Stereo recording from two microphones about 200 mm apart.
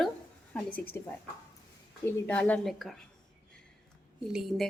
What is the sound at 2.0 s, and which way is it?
Speech, 10° left (ahead or behind).